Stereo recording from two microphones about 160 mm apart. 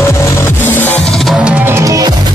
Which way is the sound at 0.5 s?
15° left (ahead or behind).